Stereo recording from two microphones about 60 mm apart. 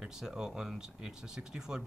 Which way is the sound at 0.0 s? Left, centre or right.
Centre.